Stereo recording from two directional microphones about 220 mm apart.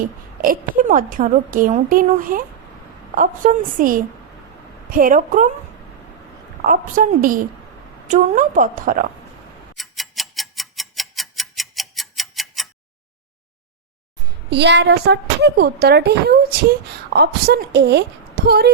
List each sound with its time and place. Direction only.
0.4 s a woman's voice: 40° right (ahead or behind)
6.7 s a woman's voice: 40° right (ahead or behind)
9.7 s tick-tock: centre (ahead or behind)
14.5 s a woman's voice: 50° right (ahead or behind)